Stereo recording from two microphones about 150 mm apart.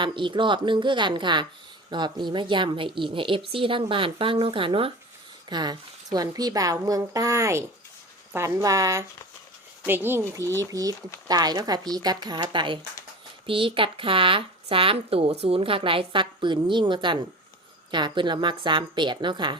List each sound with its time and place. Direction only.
0.0 s a woman's voice: 35° right (ahead or behind)